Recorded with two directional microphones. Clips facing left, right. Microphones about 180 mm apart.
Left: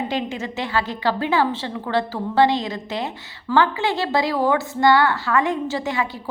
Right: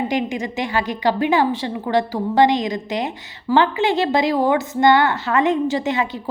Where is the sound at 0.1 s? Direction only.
15° right (ahead or behind).